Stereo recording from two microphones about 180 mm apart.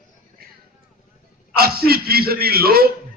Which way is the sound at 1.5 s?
60° right (ahead or behind).